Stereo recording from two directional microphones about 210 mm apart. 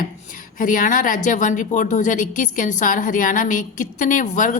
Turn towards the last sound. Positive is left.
turn(degrees=35)  # may be behind; listen again after turning